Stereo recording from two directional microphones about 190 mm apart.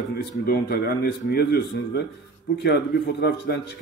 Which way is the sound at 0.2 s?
55° left (ahead or behind).